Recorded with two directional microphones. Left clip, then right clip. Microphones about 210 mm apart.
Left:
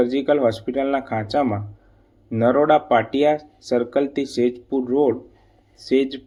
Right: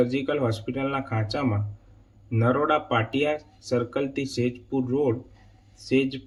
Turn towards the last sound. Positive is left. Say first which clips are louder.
# left 5 dB
turn(degrees=20)  # may be behind; listen again after turning